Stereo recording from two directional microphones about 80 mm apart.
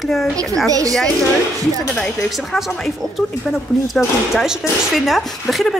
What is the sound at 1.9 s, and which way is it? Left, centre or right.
Speech, centre.